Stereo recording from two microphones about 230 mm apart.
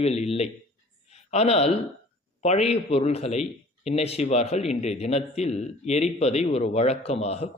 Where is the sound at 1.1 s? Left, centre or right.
Left.